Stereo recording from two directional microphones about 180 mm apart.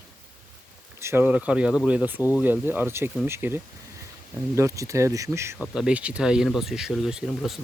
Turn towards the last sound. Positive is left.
turn(degrees=0)  # may be behind; listen again after turning